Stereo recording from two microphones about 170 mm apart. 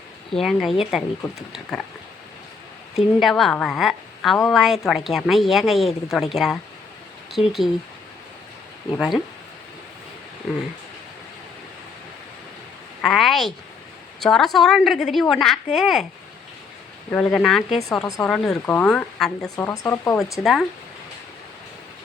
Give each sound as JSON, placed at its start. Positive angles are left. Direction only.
{"t": 0.3, "sound": "a woman's voice", "side_deg": 0}
{"t": 3.2, "sound": "a woman's voice", "side_deg": 0}
{"t": 9.0, "sound": "a woman's voice", "side_deg": 0}
{"t": 13.0, "sound": "a woman's voice", "side_deg": 0}
{"t": 17.1, "sound": "a woman's voice", "side_deg": 10}
{"t": 19.5, "sound": "speech", "side_deg": 20}
{"t": 20.3, "sound": "a woman's voice", "side_deg": 0}